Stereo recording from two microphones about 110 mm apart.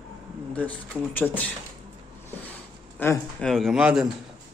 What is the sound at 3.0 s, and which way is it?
Speech, 20° left (ahead or behind).